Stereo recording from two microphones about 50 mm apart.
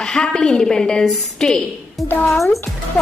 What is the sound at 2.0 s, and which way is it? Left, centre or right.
Speech, centre.